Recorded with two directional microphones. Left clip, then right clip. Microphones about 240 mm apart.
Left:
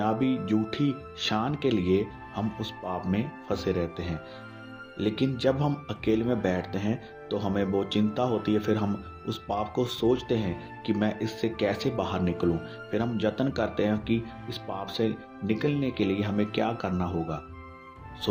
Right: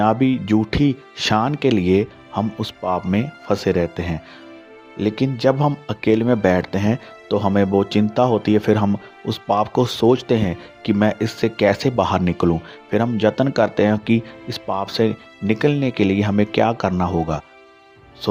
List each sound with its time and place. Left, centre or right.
0.0 s speech: right